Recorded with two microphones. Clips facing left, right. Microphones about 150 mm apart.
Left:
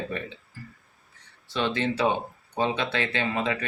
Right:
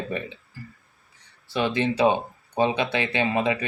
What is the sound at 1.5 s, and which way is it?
Speech, 10° right (ahead or behind).